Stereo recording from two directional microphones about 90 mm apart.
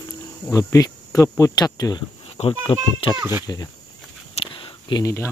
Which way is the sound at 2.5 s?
75° left (ahead or behind).